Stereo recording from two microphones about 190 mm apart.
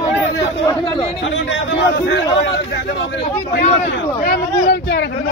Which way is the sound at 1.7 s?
65° left (ahead or behind).